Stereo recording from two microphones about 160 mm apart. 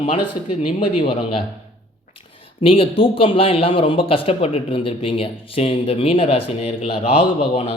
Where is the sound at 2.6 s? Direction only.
35° left (ahead or behind).